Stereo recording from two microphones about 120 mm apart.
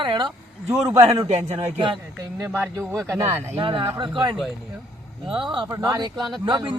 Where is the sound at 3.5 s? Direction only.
45° right (ahead or behind).